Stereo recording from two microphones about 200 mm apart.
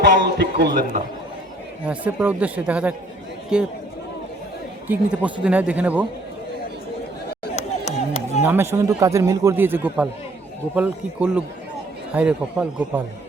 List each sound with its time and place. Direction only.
0.0 s a man's voice: 60° right (ahead or behind)
1.9 s a man's voice: 5° right (ahead or behind)
4.9 s a man's voice: 5° right (ahead or behind)
7.5 s a sound: 35° left (ahead or behind)
8.4 s a man's voice: 10° right (ahead or behind)